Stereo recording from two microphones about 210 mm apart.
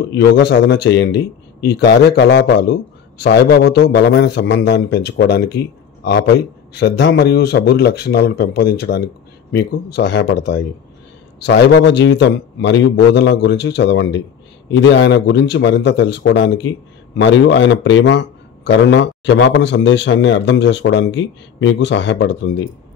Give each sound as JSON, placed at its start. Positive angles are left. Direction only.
{"t": 0.1, "sound": "speech", "side_deg": 55}